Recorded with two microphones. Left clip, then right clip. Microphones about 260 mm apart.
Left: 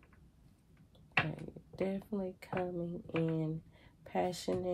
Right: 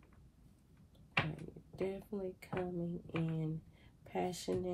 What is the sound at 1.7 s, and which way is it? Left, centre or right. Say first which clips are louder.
Speech: left 3 dB; left.